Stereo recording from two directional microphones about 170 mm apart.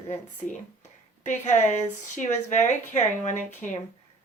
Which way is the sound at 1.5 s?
45° left (ahead or behind).